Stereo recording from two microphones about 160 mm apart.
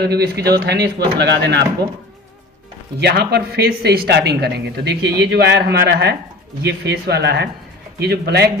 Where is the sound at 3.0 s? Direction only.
90° right.